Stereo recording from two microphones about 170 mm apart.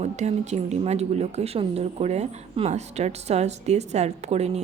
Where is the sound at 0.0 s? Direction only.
40° right (ahead or behind).